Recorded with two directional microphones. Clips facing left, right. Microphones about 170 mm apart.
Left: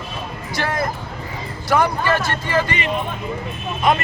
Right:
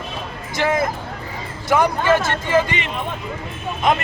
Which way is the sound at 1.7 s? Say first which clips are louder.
Right 2 dB; 20° right (ahead or behind).